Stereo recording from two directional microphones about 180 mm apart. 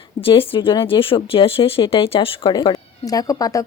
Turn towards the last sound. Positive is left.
turn(degrees=20)  # may be behind; listen again after turning